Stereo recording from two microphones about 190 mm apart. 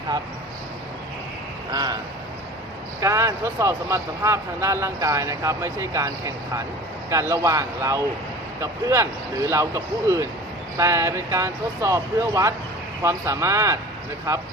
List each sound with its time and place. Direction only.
1.7 s speech: 20° right (ahead or behind)
3.0 s speech: 15° right (ahead or behind)